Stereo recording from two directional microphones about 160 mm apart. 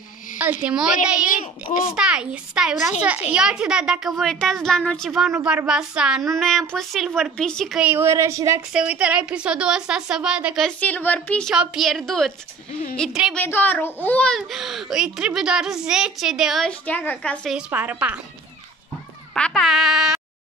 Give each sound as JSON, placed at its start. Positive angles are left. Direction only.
{"t": 0.4, "sound": "a woman's voice", "side_deg": -10}
{"t": 1.2, "sound": "a woman's voice", "side_deg": 55}
{"t": 2.0, "sound": "a child's voice", "side_deg": -5}
{"t": 8.7, "sound": "a child's voice", "side_deg": -10}
{"t": 10.8, "sound": "a child's voice", "side_deg": 10}
{"t": 17.6, "sound": "a woman's voice", "side_deg": -10}
{"t": 19.3, "sound": "a child's voice", "side_deg": 5}